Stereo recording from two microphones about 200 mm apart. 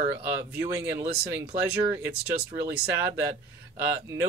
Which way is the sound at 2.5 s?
10° right (ahead or behind).